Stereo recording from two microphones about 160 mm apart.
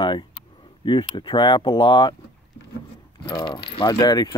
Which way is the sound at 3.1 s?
25° left (ahead or behind).